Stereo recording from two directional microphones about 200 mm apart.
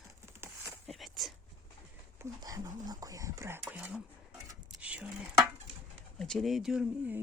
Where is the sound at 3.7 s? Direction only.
5° right (ahead or behind).